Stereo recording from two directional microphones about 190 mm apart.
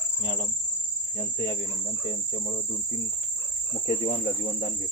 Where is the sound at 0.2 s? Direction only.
25° right (ahead or behind).